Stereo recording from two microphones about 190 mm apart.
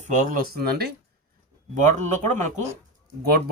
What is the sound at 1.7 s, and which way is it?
Speech, 40° right (ahead or behind).